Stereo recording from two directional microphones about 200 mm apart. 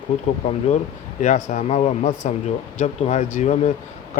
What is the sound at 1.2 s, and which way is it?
Speech, 40° left (ahead or behind).